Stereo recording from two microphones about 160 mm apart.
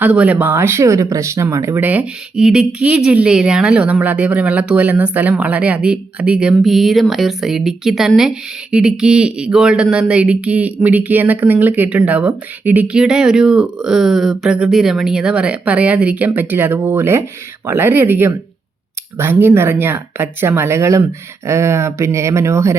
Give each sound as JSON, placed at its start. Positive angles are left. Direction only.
{"t": 0.0, "sound": "speech", "side_deg": -10}